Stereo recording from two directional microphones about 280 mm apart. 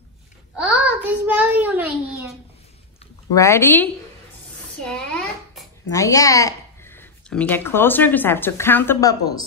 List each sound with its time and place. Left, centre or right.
0.6 s a child's voice: centre
3.3 s a woman's voice: centre
4.8 s a sound: centre
5.9 s speech: centre